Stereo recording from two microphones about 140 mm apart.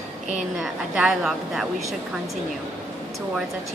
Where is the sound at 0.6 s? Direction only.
5° right (ahead or behind).